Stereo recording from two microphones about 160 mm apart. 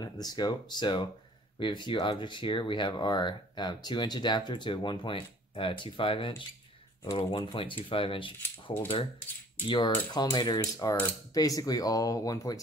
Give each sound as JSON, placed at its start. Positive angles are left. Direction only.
{"t": 0.0, "sound": "speech", "side_deg": 25}
{"t": 9.7, "sound": "speech", "side_deg": 30}